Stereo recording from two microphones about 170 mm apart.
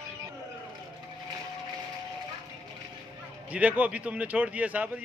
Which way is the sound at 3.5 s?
10° right (ahead or behind).